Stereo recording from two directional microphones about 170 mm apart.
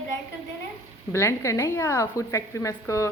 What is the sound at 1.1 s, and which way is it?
A woman's voice, 15° left (ahead or behind).